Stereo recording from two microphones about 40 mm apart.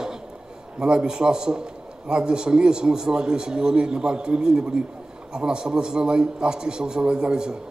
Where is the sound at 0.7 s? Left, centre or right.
Right.